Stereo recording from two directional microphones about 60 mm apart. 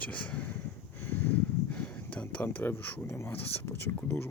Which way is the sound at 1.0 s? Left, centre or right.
Left.